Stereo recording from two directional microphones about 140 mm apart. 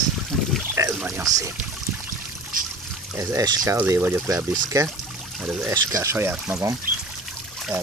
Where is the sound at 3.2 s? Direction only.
25° right (ahead or behind).